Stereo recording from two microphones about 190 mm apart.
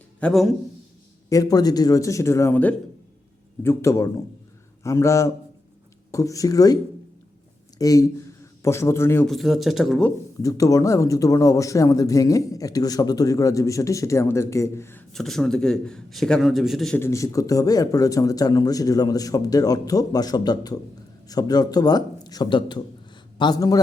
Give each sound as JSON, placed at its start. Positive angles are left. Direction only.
{"t": 0.2, "sound": "a man's voice", "side_deg": 5}
{"t": 1.3, "sound": "a man's voice", "side_deg": 20}
{"t": 7.8, "sound": "a man's voice", "side_deg": 20}
{"t": 9.2, "sound": "a man's voice", "side_deg": 0}
{"t": 10.4, "sound": "a man's voice", "side_deg": 15}
{"t": 15.1, "sound": "a man's voice", "side_deg": 0}
{"t": 17.0, "sound": "speech", "side_deg": 15}